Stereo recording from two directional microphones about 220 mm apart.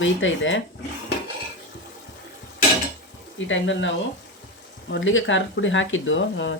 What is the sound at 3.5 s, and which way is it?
Speech, 60° left (ahead or behind).